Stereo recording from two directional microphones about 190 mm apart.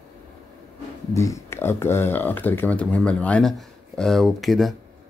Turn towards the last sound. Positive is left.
turn(degrees=0)  # may be behind; listen again after turning